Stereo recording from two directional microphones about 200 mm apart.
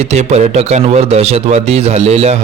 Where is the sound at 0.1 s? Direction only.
35° right (ahead or behind).